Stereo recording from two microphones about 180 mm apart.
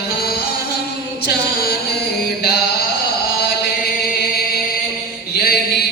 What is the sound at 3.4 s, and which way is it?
Chant, 60° left (ahead or behind).